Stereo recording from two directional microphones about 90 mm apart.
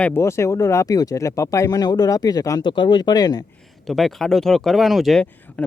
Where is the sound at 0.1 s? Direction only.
30° left (ahead or behind).